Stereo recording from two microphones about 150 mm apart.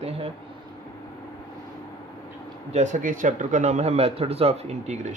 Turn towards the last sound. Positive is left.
turn(degrees=-45)  # may be behind; listen again after turning